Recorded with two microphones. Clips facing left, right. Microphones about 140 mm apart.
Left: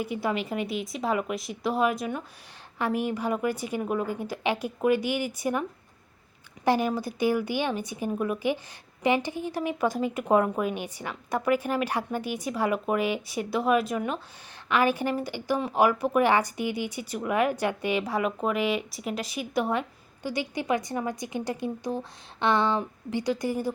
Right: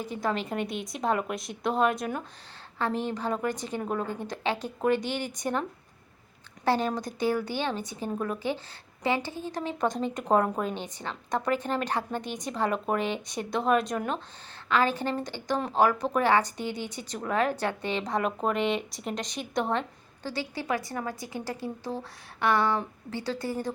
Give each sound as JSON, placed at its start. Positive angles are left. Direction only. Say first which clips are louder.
{"t": 0.0, "sound": "speech", "louder": "left 2 dB", "side_deg": 10}
{"t": 2.7, "sound": "a woman's voice", "louder": "left 2 dB", "side_deg": 10}
{"t": 6.7, "sound": "a woman's voice", "louder": "left 2 dB", "side_deg": 10}